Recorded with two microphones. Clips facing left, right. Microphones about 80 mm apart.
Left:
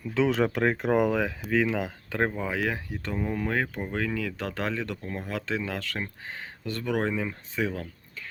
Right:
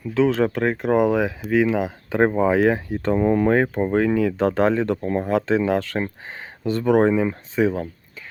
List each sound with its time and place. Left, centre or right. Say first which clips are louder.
0.1 s speech: right 5 dB; centre
2.3 s speech: right 12 dB; right
3.2 s speech: right 10 dB; right